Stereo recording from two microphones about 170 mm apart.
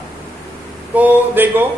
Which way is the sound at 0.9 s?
10° right (ahead or behind).